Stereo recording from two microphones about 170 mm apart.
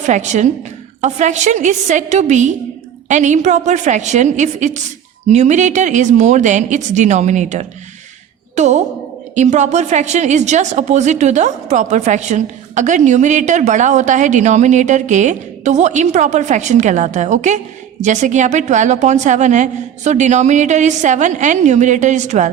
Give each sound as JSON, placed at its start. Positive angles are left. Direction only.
{"t": 0.0, "sound": "a woman's voice", "side_deg": -45}